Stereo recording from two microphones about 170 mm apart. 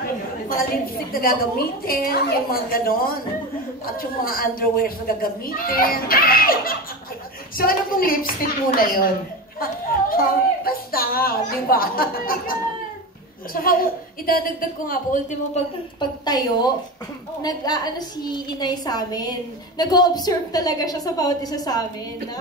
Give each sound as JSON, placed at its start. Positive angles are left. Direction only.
{"t": 0.5, "sound": "a child's voice", "side_deg": 60}
{"t": 16.0, "sound": "a woman's voice", "side_deg": 25}